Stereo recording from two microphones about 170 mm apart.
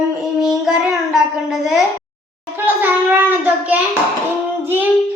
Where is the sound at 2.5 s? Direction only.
10° right (ahead or behind).